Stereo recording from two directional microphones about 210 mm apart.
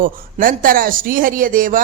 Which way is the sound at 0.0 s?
40° right (ahead or behind).